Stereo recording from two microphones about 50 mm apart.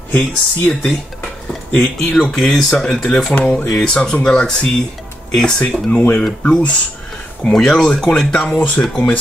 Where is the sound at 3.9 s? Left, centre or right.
Centre.